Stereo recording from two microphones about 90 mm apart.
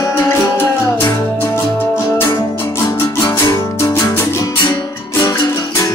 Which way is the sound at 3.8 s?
35° left (ahead or behind).